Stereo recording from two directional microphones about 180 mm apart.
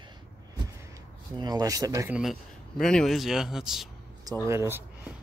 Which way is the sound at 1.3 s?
20° right (ahead or behind).